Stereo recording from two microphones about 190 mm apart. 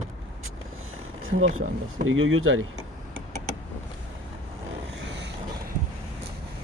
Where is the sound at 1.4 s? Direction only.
90° right.